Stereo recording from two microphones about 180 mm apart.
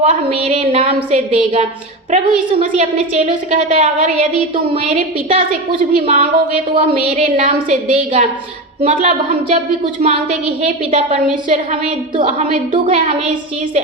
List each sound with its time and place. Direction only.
0.0 s a woman's voice: 35° right (ahead or behind)
6.0 s a woman's voice: 35° right (ahead or behind)